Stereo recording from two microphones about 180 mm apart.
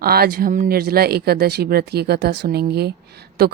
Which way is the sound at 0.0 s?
55° right (ahead or behind).